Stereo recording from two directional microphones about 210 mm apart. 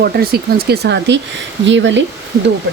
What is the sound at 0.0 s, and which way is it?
Speech, 45° right (ahead or behind).